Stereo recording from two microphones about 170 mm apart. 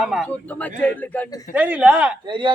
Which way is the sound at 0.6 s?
10° left (ahead or behind).